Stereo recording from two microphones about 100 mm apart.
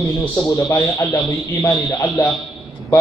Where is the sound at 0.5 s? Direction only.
35° left (ahead or behind).